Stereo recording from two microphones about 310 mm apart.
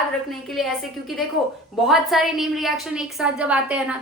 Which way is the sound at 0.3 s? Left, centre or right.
Centre.